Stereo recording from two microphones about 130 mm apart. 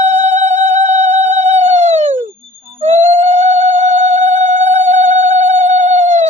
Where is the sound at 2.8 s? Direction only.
55° right (ahead or behind).